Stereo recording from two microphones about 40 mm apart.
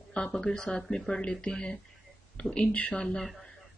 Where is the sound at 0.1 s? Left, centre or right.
Left.